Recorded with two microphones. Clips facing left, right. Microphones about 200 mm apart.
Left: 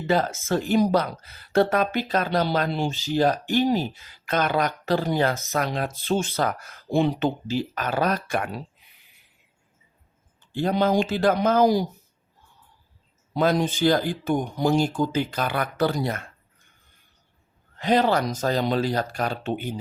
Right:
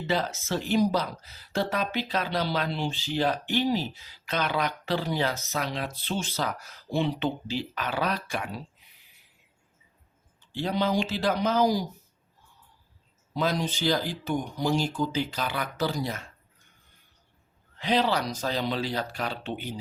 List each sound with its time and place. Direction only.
0.1 s speech: 50° left (ahead or behind)
10.4 s speech: 50° left (ahead or behind)
13.3 s speech: 55° left (ahead or behind)
17.7 s speech: 50° left (ahead or behind)